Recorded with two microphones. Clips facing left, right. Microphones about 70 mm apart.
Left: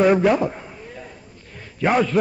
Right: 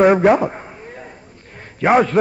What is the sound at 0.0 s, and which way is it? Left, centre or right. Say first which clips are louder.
Speech: right 4 dB; right.